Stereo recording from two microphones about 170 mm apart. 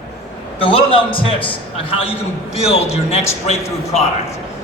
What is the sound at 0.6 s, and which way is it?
A man's voice, 30° left (ahead or behind).